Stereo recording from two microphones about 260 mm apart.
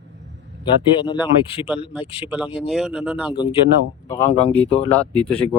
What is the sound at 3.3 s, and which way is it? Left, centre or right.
Speech, centre.